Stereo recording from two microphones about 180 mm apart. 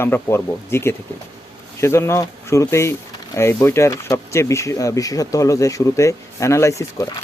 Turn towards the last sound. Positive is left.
turn(degrees=15)  # may be behind; listen again after turning